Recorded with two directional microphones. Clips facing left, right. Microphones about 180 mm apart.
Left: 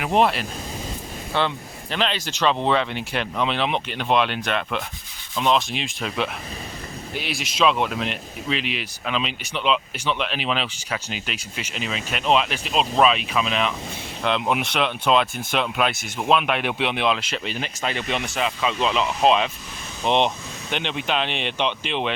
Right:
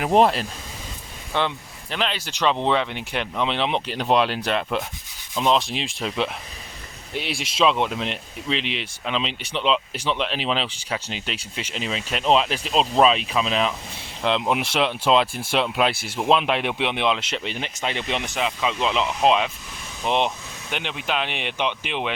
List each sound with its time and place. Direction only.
0.0 s speech: 35° right (ahead or behind)
1.3 s speech: 15° right (ahead or behind)